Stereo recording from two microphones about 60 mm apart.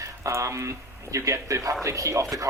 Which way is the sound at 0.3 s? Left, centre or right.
Right.